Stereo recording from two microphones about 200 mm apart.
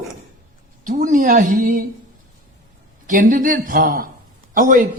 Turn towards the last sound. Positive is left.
turn(degrees=-40)  # may be behind; listen again after turning